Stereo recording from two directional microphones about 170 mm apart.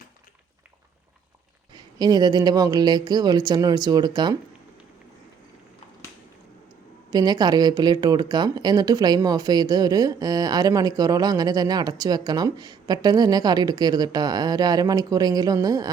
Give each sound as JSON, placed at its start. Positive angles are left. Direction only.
{"t": 1.7, "sound": "speech", "side_deg": -25}
{"t": 7.1, "sound": "speech", "side_deg": -25}